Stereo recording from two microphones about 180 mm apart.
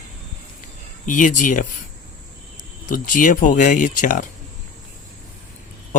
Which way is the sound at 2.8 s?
50° left (ahead or behind).